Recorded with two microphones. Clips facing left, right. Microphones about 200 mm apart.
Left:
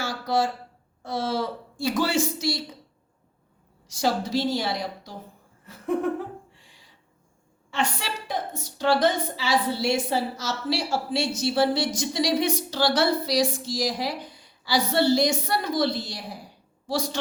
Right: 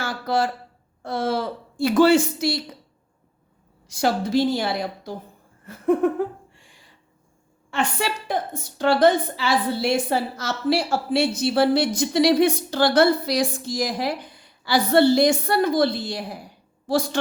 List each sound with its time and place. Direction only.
0.0 s a sound: 55° right (ahead or behind)
1.0 s a woman's voice: 60° right (ahead or behind)
3.8 s a woman's voice: 55° right (ahead or behind)
5.6 s laughter: 50° right (ahead or behind)
7.7 s a woman's voice: 55° right (ahead or behind)